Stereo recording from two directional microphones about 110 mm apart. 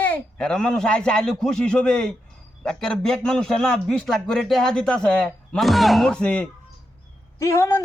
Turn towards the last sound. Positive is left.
turn(degrees=25)  # may be behind; listen again after turning